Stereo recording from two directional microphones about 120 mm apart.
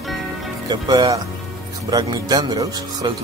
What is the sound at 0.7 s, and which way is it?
Speech, 35° right (ahead or behind).